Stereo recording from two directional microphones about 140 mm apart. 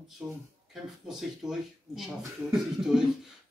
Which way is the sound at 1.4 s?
5° right (ahead or behind).